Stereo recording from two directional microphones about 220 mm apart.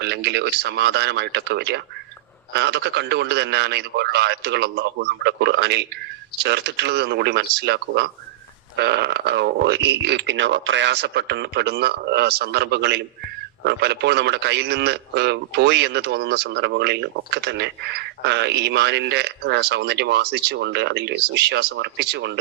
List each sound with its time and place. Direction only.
0.0 s a man's voice: 50° right (ahead or behind)